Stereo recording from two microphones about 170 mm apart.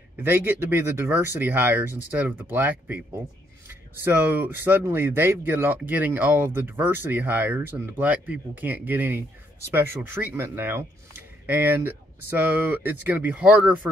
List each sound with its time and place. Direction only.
0.2 s speech: 10° right (ahead or behind)